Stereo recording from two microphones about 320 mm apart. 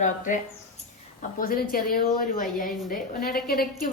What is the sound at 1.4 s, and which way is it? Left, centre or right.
A woman's voice, left.